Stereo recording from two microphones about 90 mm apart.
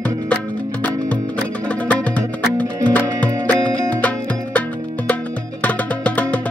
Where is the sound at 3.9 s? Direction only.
15° left (ahead or behind).